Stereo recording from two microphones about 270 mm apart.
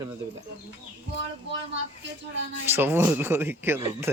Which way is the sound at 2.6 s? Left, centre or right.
Centre.